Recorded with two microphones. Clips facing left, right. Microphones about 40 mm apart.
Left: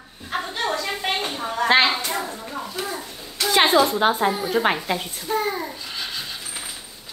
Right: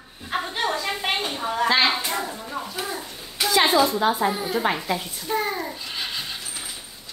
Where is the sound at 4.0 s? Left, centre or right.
Left.